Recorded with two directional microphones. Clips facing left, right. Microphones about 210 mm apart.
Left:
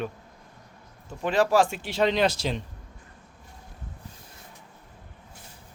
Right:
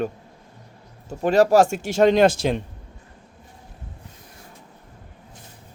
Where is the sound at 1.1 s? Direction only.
40° right (ahead or behind).